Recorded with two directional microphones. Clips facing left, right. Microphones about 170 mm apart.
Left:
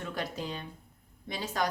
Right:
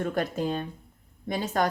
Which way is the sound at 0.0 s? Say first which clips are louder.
Right 8 dB; 50° right (ahead or behind).